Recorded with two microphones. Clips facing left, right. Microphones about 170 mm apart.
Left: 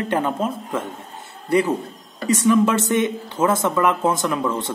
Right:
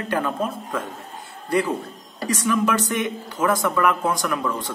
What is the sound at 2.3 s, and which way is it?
Speech, 25° left (ahead or behind).